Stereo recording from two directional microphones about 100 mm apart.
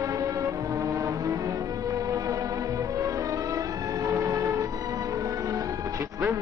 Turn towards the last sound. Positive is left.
turn(degrees=-30)  # may be behind; listen again after turning